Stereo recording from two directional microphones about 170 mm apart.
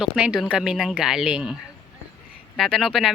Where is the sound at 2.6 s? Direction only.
Centre (ahead or behind).